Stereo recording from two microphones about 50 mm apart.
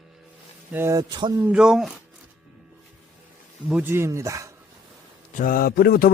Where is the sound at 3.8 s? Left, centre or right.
Right.